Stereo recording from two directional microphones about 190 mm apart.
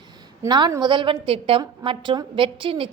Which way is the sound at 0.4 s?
20° right (ahead or behind).